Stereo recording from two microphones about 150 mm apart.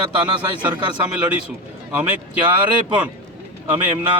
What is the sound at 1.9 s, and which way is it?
Speech, 10° right (ahead or behind).